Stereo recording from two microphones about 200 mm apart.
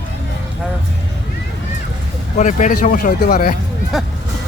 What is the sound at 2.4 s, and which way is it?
Speech, 40° left (ahead or behind).